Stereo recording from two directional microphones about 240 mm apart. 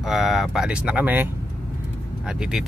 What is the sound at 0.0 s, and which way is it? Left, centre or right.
Speech, centre.